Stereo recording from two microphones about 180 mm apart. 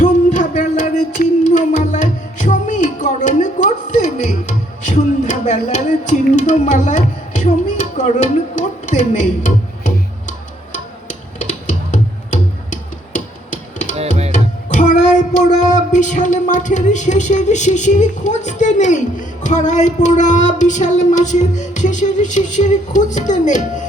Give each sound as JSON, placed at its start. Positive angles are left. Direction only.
{"t": 0.0, "sound": "music", "side_deg": 45}